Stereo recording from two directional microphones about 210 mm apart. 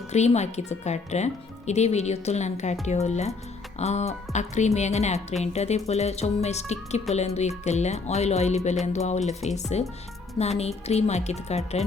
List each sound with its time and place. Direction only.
0.1 s speech: 30° left (ahead or behind)